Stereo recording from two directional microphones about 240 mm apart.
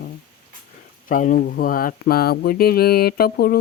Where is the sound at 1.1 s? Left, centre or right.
Left.